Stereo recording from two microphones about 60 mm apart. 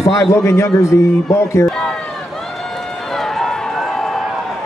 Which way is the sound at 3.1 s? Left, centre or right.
Centre.